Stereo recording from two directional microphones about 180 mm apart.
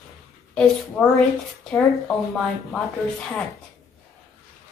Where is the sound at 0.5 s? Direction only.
5° left (ahead or behind).